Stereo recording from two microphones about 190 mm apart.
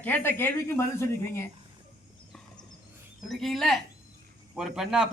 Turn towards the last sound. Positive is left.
turn(degrees=-5)  # may be behind; listen again after turning